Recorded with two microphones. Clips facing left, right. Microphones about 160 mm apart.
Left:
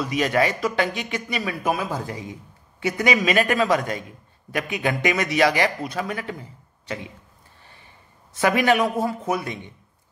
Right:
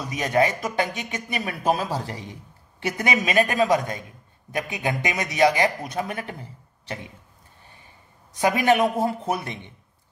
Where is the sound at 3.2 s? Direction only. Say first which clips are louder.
Left 1 dB; 20° right (ahead or behind).